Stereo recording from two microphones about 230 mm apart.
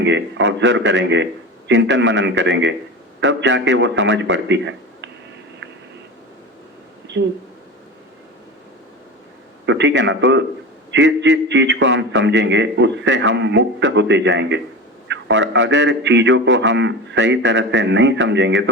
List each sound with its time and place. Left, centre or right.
0.0 s a man's voice: right
7.1 s speech: right
9.6 s a man's voice: right